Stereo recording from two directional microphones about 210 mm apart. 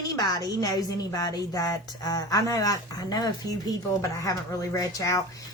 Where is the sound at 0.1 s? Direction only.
20° left (ahead or behind).